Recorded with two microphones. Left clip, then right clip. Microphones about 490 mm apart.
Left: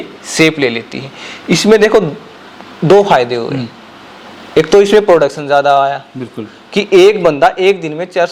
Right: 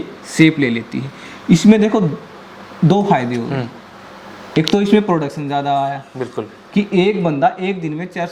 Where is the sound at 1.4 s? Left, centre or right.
Left.